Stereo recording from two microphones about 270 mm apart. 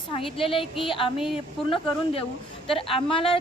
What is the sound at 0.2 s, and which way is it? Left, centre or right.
Speech, centre.